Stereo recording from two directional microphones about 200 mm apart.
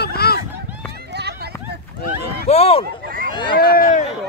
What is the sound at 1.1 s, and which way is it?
Run, 55° right (ahead or behind).